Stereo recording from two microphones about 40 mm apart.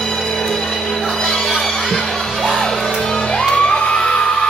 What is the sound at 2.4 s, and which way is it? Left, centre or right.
Music, centre.